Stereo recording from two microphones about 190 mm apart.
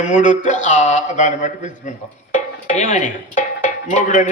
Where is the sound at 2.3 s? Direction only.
40° left (ahead or behind).